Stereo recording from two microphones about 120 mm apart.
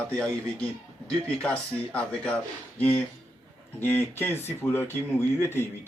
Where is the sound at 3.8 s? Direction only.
20° left (ahead or behind).